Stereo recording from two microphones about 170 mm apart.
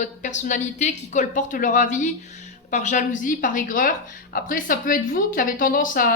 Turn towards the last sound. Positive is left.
turn(degrees=55)  # may be behind; listen again after turning